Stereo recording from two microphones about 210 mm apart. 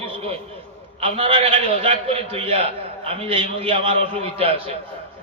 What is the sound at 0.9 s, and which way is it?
A man's voice, 30° right (ahead or behind).